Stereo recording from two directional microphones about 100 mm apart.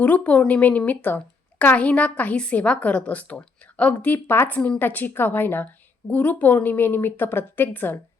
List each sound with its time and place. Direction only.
0.0 s a woman's voice: 15° left (ahead or behind)